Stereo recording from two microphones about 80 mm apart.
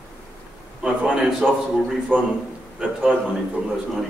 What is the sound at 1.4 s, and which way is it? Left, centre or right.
Speech, centre.